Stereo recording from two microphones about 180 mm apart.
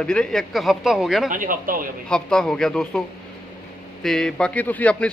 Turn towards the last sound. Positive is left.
turn(degrees=10)  # may be behind; listen again after turning